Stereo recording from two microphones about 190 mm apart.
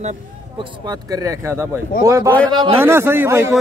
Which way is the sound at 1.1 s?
15° right (ahead or behind).